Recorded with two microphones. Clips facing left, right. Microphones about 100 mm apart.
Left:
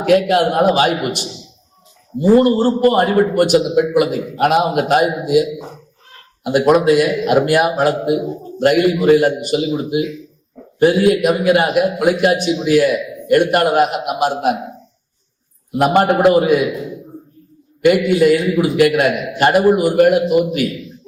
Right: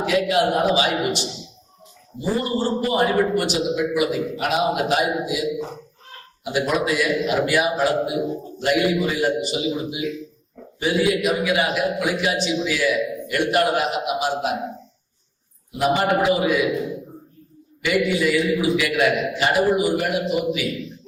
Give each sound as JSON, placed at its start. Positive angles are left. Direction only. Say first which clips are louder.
{"t": 0.0, "sound": "a man's voice", "louder": "left 6 dB", "side_deg": 55}
{"t": 16.2, "sound": "a man's voice", "louder": "left 7 dB", "side_deg": 55}
{"t": 17.8, "sound": "a man's voice", "louder": "left 8 dB", "side_deg": 50}